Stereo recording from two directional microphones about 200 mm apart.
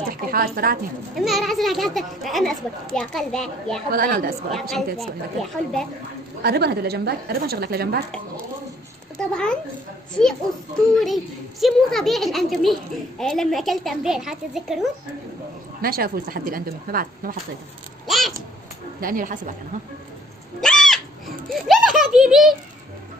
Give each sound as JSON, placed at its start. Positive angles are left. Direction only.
{"t": 0.1, "sound": "speech", "side_deg": -45}
{"t": 1.1, "sound": "speech", "side_deg": 0}
{"t": 3.9, "sound": "a woman's voice", "side_deg": -45}
{"t": 4.6, "sound": "speech", "side_deg": 0}
{"t": 6.4, "sound": "a woman's voice", "side_deg": -55}
{"t": 9.2, "sound": "speech", "side_deg": 5}
{"t": 11.6, "sound": "speech", "side_deg": 0}
{"t": 15.8, "sound": "a woman's voice", "side_deg": -45}
{"t": 18.0, "sound": "a sound", "side_deg": 0}
{"t": 18.9, "sound": "a woman's voice", "side_deg": -45}
{"t": 20.6, "sound": "cat", "side_deg": 0}
{"t": 21.5, "sound": "a sound", "side_deg": 0}